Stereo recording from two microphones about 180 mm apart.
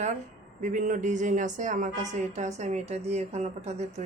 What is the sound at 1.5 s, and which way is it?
Speech, 45° right (ahead or behind).